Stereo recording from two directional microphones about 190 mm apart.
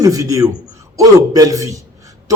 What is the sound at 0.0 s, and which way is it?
Speech, 15° right (ahead or behind).